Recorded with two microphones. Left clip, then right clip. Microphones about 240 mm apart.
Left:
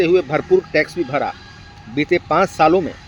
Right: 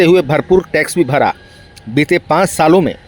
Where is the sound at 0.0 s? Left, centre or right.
Right.